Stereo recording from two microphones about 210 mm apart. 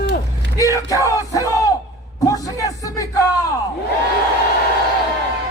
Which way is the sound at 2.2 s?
15° left (ahead or behind).